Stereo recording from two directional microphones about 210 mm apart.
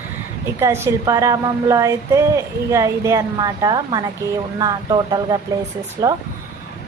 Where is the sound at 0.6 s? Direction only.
15° right (ahead or behind).